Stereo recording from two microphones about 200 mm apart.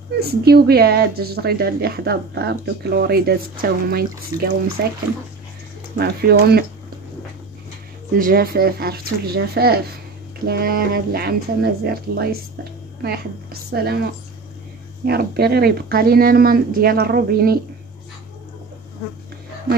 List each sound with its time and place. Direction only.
0.2 s speech: 50° right (ahead or behind)
4.3 s speech: 15° right (ahead or behind)
4.8 s speech: 55° right (ahead or behind)
5.9 s speech: 50° right (ahead or behind)
8.2 s speech: 50° right (ahead or behind)
13.0 s a sound: 50° right (ahead or behind)
15.0 s speech: 55° right (ahead or behind)